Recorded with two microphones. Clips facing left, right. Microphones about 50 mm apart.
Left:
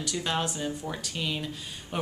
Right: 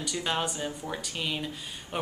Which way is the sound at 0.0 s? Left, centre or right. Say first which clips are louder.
Even; centre.